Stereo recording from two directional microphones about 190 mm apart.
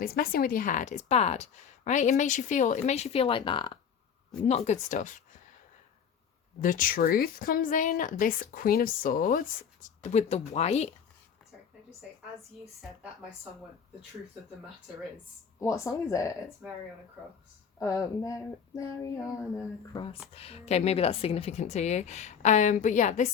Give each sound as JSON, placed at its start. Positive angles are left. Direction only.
{"t": 0.0, "sound": "speech", "side_deg": 50}
{"t": 4.4, "sound": "speech", "side_deg": 35}
{"t": 6.6, "sound": "a woman's voice", "side_deg": 45}
{"t": 15.6, "sound": "speech", "side_deg": 15}
{"t": 16.6, "sound": "speech", "side_deg": -5}
{"t": 17.7, "sound": "speech", "side_deg": 15}
{"t": 20.3, "sound": "speech", "side_deg": 30}